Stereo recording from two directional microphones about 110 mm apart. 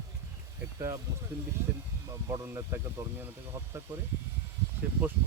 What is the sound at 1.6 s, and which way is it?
Speech, 25° right (ahead or behind).